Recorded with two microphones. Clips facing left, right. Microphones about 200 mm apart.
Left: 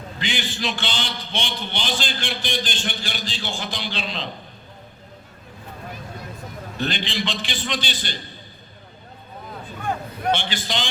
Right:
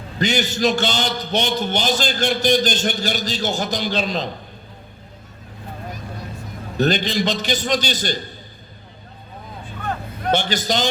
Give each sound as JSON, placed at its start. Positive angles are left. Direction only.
{"t": 0.2, "sound": "a man's voice", "side_deg": -40}
{"t": 6.7, "sound": "a man's voice", "side_deg": -40}
{"t": 10.3, "sound": "a man's voice", "side_deg": -40}